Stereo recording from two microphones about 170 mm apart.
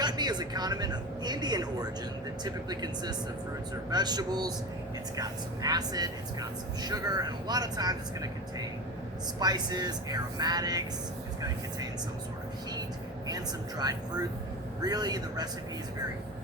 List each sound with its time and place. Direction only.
0.0 s a woman's voice: 25° right (ahead or behind)
13.2 s speech: 25° right (ahead or behind)